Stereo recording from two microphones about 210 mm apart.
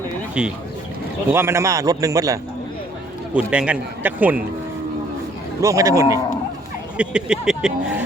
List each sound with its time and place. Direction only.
0.4 s a man's voice: 5° right (ahead or behind)
3.3 s a man's voice: 5° right (ahead or behind)
5.6 s a man's voice: 15° right (ahead or behind)